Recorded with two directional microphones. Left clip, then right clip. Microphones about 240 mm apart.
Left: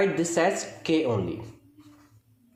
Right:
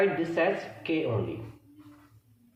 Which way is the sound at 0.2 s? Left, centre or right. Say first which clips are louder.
Left 3 dB; left.